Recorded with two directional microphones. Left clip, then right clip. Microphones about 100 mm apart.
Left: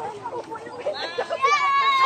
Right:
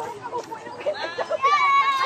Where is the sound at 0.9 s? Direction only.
25° left (ahead or behind).